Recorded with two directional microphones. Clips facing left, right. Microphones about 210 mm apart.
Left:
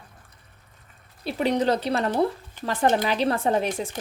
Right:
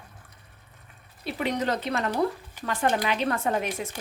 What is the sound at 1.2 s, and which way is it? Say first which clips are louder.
Speech: left 5 dB; 30° left (ahead or behind).